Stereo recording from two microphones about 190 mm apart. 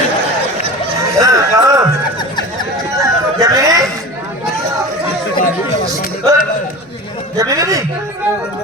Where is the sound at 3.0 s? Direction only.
15° right (ahead or behind).